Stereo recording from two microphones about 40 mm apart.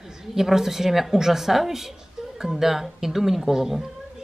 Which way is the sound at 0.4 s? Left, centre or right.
Centre.